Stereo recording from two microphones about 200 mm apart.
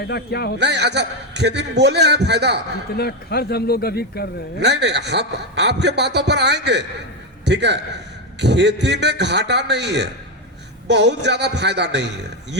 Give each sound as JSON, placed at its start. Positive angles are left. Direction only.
{"t": 0.0, "sound": "speech", "side_deg": 55}
{"t": 0.6, "sound": "a man's voice", "side_deg": -60}
{"t": 3.0, "sound": "speech", "side_deg": 50}
{"t": 4.6, "sound": "a man's voice", "side_deg": -60}